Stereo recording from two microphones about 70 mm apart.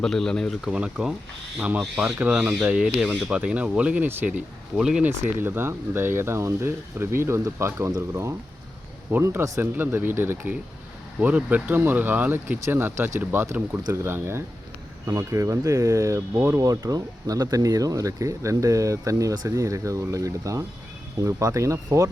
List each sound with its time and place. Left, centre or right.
0.0 s speech: centre
0.6 s speech: centre
1.8 s speech: centre
2.2 s speech: centre
2.8 s speech: centre
3.3 s speech: centre
5.0 s speech: right
15.0 s speech: right